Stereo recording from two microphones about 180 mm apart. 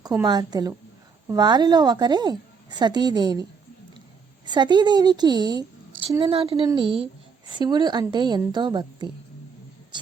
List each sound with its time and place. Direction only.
0.0 s a woman's voice: 20° right (ahead or behind)
4.4 s a woman's voice: 25° right (ahead or behind)
9.9 s a sound: 25° right (ahead or behind)